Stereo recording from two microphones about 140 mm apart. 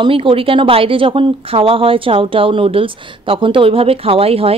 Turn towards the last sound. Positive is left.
turn(degrees=-45)  # may be behind; listen again after turning